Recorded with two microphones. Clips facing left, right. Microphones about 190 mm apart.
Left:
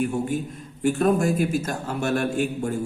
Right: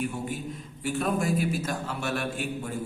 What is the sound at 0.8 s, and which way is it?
A man's voice, 50° left (ahead or behind).